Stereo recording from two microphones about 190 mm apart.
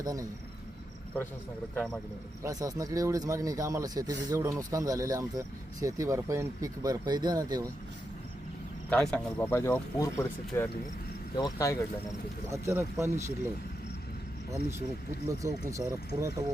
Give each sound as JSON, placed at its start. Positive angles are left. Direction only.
{"t": 0.0, "sound": "speech", "side_deg": -20}
{"t": 1.7, "sound": "speech", "side_deg": 5}
{"t": 2.4, "sound": "speech", "side_deg": -20}
{"t": 8.9, "sound": "speech", "side_deg": 5}
{"t": 12.5, "sound": "speech", "side_deg": -15}
{"t": 14.5, "sound": "speech", "side_deg": -15}